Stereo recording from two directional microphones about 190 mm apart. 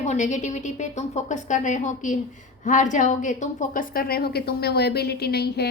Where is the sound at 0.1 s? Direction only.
40° left (ahead or behind).